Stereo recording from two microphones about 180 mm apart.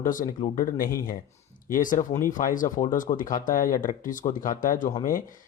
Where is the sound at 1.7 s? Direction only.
50° left (ahead or behind).